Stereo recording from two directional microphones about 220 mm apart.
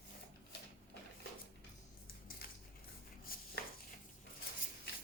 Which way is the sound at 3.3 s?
40° left (ahead or behind).